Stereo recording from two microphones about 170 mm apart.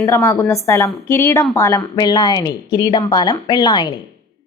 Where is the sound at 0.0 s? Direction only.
15° left (ahead or behind).